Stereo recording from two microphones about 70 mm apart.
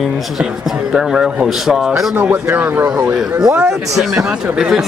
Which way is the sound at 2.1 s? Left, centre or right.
Right.